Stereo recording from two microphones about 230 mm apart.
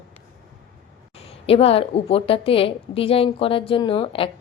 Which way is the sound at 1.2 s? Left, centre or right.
Left.